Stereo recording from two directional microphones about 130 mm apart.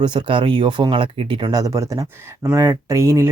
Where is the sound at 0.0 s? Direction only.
35° right (ahead or behind).